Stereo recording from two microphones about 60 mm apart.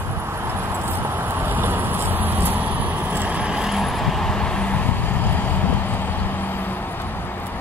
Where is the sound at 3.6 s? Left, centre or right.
Centre; by 6.7 s left.